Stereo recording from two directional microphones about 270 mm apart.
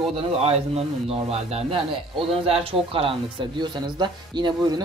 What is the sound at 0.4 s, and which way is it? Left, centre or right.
A man's voice, right.